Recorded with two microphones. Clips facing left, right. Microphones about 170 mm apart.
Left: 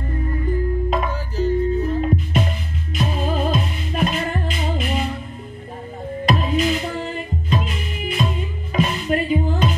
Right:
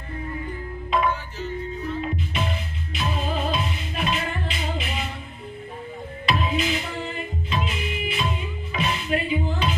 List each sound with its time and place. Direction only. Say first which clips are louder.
0.8 s music: left 1 dB; 40° left (ahead or behind)
6.2 s music: left 5 dB; 45° left (ahead or behind)
8.7 s music: left 5 dB; 45° left (ahead or behind)